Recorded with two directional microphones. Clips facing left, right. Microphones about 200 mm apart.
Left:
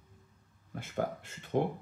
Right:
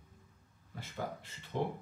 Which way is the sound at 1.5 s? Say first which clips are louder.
Left 5 dB; 55° left (ahead or behind).